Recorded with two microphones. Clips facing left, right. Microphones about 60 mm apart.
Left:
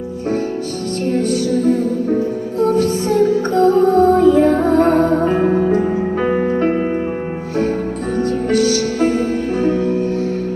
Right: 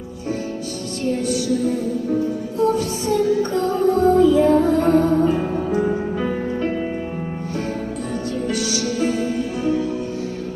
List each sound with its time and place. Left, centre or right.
1.1 s music: left
8.4 s music: left